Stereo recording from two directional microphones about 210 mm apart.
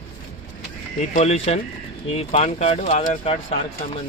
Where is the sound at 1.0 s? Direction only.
35° left (ahead or behind).